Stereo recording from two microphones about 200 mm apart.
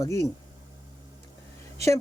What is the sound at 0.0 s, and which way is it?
Speech, 15° left (ahead or behind).